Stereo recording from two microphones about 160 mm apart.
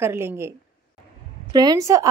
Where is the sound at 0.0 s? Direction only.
15° right (ahead or behind).